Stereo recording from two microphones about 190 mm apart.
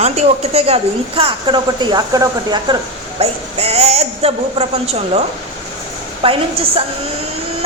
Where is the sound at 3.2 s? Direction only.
30° right (ahead or behind).